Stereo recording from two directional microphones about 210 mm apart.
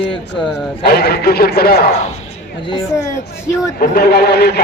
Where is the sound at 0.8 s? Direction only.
50° left (ahead or behind).